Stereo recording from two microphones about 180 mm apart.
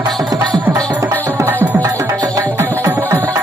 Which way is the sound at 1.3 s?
10° right (ahead or behind).